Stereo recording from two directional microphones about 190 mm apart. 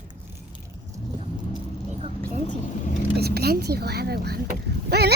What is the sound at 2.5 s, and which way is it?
Speech, 40° left (ahead or behind).